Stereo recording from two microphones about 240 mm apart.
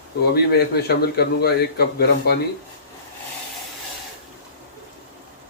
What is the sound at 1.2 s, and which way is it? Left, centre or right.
Speech, left.